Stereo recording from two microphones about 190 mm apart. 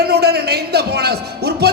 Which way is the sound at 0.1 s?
60° right (ahead or behind).